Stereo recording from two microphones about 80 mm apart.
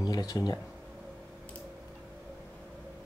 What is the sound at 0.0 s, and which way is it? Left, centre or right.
Speech, left.